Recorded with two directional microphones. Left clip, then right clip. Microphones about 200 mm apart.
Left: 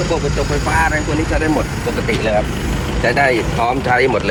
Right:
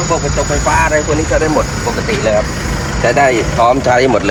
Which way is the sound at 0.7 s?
30° right (ahead or behind).